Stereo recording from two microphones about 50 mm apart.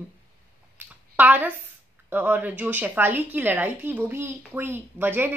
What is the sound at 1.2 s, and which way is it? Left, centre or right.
A woman's voice, right.